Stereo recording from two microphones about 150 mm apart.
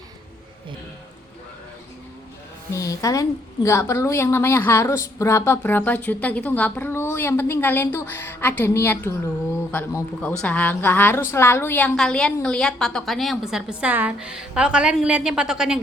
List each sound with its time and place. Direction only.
2.7 s a woman's voice: 20° left (ahead or behind); by 15.8 s 5° right (ahead or behind)